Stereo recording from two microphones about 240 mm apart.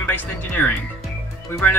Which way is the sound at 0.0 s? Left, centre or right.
Centre.